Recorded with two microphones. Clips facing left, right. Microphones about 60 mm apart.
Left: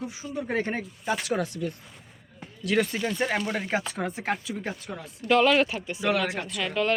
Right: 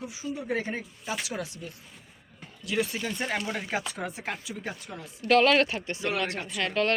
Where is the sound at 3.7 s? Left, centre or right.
Left.